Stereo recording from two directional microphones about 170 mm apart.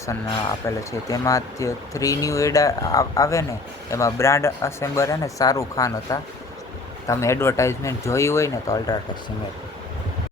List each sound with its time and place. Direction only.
0.0 s speech: 20° left (ahead or behind)